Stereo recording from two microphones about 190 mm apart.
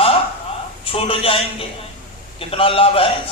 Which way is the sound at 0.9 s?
30° left (ahead or behind).